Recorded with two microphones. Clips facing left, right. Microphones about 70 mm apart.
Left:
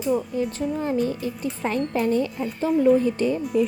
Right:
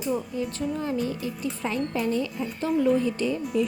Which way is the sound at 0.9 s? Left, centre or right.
Left.